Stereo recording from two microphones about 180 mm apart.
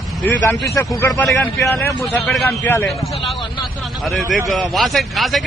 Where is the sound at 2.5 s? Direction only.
10° left (ahead or behind).